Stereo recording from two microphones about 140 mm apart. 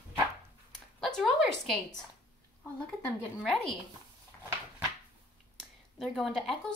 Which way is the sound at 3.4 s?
5° left (ahead or behind).